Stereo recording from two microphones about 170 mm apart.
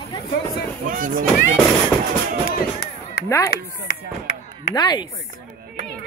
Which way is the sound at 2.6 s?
70° left (ahead or behind).